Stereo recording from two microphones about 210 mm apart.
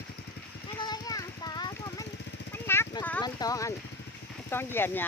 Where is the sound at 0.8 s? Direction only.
20° left (ahead or behind).